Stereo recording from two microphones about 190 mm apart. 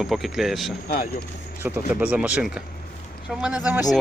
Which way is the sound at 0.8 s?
50° left (ahead or behind).